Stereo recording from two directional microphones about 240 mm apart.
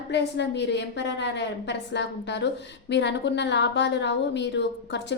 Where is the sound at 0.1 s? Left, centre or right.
Left.